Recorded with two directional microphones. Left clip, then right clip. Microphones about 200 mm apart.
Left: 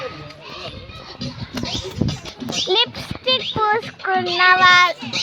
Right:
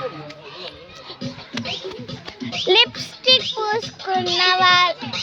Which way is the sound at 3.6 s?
10° left (ahead or behind).